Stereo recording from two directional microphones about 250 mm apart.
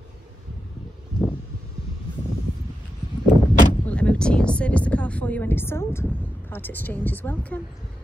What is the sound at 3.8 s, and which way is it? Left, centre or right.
A woman's voice, centre.